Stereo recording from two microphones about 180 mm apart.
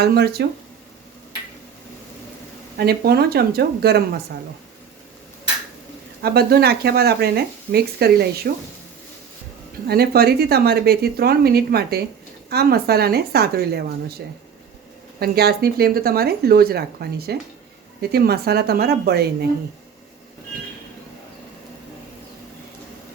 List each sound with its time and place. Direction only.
0.0 s speech: 60° right (ahead or behind)
2.7 s speech: 60° right (ahead or behind)
6.2 s speech: 60° right (ahead or behind)
9.8 s speech: 60° right (ahead or behind)
15.2 s speech: 60° right (ahead or behind)